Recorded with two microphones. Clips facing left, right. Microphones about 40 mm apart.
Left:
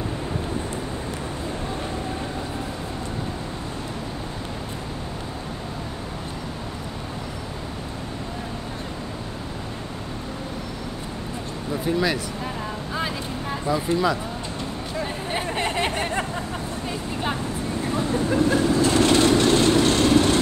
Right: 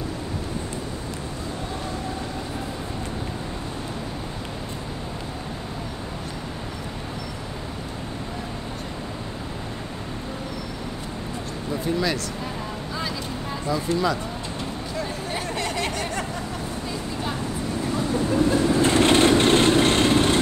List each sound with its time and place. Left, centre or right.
11.7 s speech: centre
12.9 s vehicle: left
15.0 s a sound: left
17.8 s vehicle: left
18.7 s vehicle: right